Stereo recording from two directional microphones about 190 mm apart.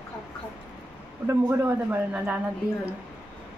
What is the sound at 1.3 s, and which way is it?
A man's voice, 10° right (ahead or behind).